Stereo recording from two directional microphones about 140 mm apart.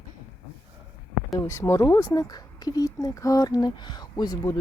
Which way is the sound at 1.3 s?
20° left (ahead or behind).